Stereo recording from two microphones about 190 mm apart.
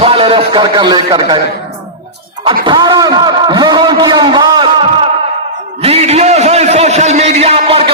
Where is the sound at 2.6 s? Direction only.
25° right (ahead or behind).